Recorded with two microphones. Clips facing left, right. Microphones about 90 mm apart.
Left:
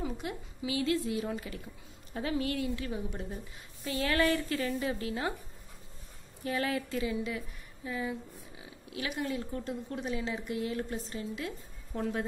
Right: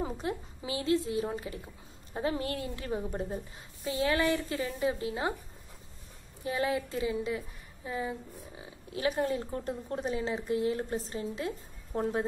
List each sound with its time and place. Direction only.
0.0 s a woman's voice: 35° right (ahead or behind)
3.8 s a woman's voice: 20° right (ahead or behind)
6.4 s a woman's voice: 20° right (ahead or behind)